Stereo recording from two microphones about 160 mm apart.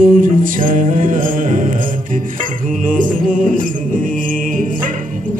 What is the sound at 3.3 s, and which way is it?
Music, 60° right (ahead or behind).